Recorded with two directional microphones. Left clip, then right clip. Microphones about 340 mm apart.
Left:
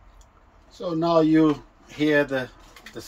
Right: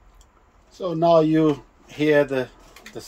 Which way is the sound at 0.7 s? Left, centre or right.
Right.